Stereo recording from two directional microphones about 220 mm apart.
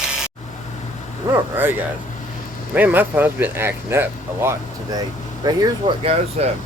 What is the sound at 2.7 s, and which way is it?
Speech, 10° right (ahead or behind).